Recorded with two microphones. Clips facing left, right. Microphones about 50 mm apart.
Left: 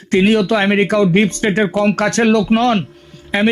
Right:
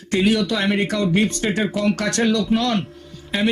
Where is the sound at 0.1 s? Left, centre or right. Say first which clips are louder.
Left 6 dB; left.